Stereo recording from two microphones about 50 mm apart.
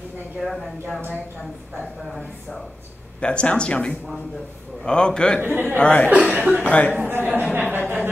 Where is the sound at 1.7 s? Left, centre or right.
Centre.